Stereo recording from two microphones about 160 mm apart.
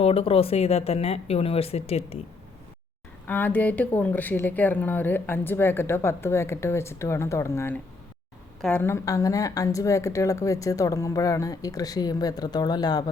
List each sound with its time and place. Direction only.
0.0 s speech: 40° left (ahead or behind)
3.2 s speech: 10° left (ahead or behind)